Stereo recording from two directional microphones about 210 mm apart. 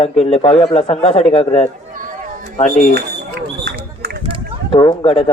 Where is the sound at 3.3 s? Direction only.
50° right (ahead or behind).